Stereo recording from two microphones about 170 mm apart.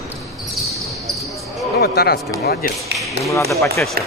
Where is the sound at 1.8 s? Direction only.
70° left (ahead or behind).